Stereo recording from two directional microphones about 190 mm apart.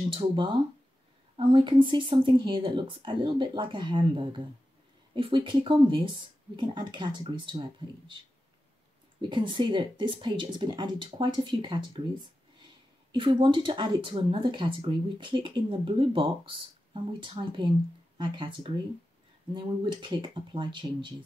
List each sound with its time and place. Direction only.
0.1 s speech: 25° right (ahead or behind)
9.2 s speech: 25° right (ahead or behind)